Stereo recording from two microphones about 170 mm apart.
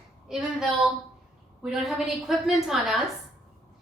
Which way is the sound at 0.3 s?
Centre (ahead or behind).